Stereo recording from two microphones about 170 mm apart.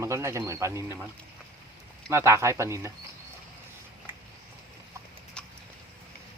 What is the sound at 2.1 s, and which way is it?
Speech, 15° right (ahead or behind).